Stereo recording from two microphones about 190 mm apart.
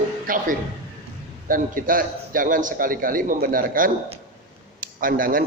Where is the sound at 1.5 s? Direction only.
45° right (ahead or behind).